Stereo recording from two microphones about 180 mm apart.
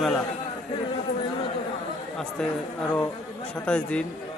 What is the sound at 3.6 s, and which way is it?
Speech, 5° left (ahead or behind).